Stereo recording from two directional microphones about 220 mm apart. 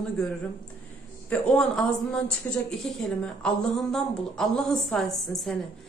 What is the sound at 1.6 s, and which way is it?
A woman's voice, 5° left (ahead or behind).